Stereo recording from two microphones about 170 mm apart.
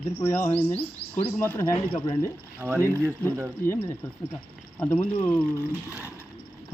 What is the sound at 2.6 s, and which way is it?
Speech, 10° right (ahead or behind).